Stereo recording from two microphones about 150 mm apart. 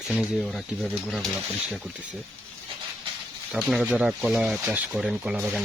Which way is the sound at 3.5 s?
Centre (ahead or behind).